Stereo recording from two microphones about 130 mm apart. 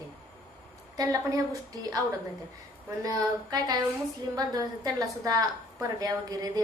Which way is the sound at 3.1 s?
30° right (ahead or behind).